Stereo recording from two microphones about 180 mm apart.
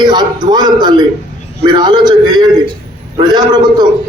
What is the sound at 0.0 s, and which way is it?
A man's voice, 25° right (ahead or behind).